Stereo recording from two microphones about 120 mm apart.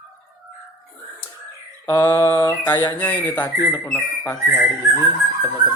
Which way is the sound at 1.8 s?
30° left (ahead or behind).